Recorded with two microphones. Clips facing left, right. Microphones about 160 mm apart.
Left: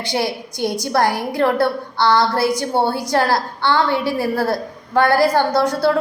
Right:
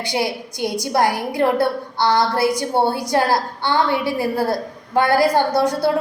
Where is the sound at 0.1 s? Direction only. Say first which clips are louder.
Left 2 dB; 15° right (ahead or behind).